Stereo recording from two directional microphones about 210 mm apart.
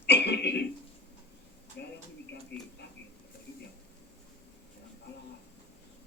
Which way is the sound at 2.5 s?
10° left (ahead or behind).